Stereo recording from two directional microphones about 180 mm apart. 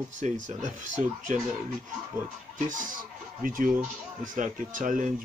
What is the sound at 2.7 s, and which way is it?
Speech, 45° right (ahead or behind).